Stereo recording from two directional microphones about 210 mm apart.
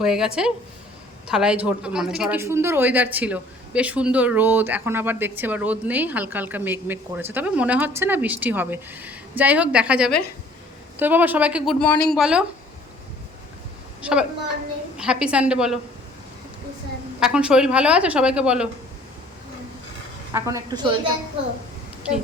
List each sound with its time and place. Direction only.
0.0 s a woman's voice: 5° right (ahead or behind)
14.0 s a woman's voice: 5° right (ahead or behind)
17.2 s a woman's voice: 5° right (ahead or behind)
20.3 s speech: 15° right (ahead or behind)
22.0 s a woman's voice: 5° right (ahead or behind)